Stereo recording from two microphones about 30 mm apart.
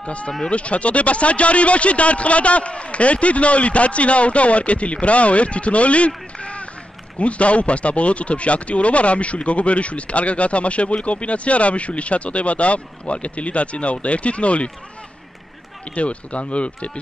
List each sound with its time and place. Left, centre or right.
0.0 s speech: left
15.9 s speech: left